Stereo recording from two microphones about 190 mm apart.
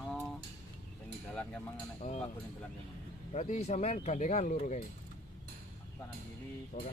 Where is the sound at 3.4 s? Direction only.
35° left (ahead or behind).